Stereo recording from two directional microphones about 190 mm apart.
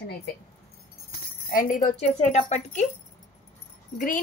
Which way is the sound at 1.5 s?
45° left (ahead or behind).